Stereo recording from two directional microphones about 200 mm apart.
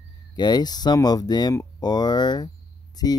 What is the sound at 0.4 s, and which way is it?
Speech, 20° left (ahead or behind).